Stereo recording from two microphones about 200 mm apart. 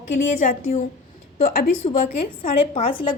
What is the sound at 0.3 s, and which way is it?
A woman's voice, 35° left (ahead or behind).